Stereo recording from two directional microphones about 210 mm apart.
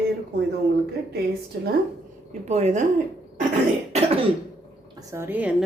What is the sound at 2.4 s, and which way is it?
Speech, 30° right (ahead or behind).